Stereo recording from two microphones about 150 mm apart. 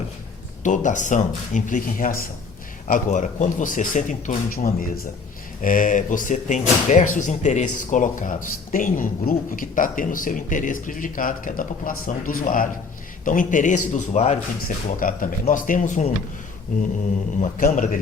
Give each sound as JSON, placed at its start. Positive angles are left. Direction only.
{"t": 0.6, "sound": "speech", "side_deg": 55}
{"t": 2.8, "sound": "speech", "side_deg": 55}
{"t": 14.8, "sound": "speech", "side_deg": 65}